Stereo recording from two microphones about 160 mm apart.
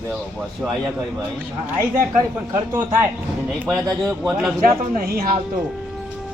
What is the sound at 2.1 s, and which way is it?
Speech, 20° right (ahead or behind).